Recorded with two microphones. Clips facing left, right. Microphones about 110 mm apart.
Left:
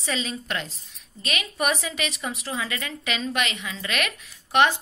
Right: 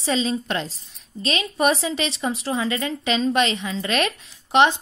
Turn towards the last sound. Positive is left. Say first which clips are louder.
# right 3 dB
turn(degrees=-20)  # may be behind; listen again after turning